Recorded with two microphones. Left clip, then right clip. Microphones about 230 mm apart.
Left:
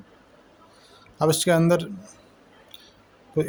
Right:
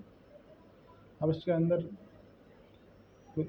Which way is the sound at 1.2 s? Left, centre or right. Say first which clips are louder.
Left 11 dB; left.